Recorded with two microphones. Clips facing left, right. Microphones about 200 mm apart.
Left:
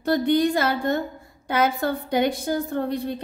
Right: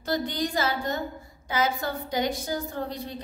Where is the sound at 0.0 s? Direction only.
55° left (ahead or behind).